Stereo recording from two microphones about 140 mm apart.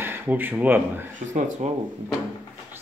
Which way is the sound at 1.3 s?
60° right (ahead or behind).